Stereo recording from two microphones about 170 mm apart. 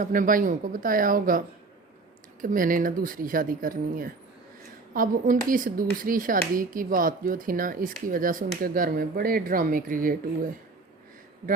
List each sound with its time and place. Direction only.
0.0 s speech: 50° right (ahead or behind)
2.4 s speech: 50° right (ahead or behind)